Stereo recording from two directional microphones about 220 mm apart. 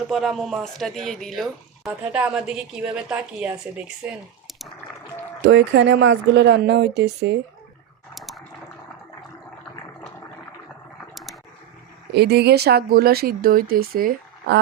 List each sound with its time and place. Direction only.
0.1 s speech: centre (ahead or behind)
5.5 s speech: 55° right (ahead or behind)
8.1 s water: centre (ahead or behind)
11.1 s a sound: centre (ahead or behind)
12.1 s speech: 50° right (ahead or behind)